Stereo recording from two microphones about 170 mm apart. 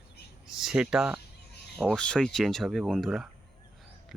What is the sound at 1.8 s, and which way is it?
Speech, 5° left (ahead or behind).